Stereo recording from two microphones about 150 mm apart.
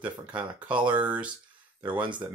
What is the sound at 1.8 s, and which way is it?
Speech, 30° right (ahead or behind).